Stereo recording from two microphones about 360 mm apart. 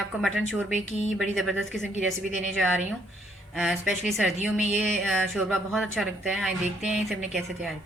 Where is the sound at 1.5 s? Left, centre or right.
Centre.